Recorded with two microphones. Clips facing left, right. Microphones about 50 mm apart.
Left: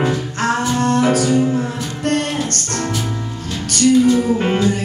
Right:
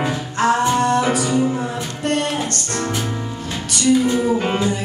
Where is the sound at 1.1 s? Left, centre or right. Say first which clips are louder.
Left 3 dB; right.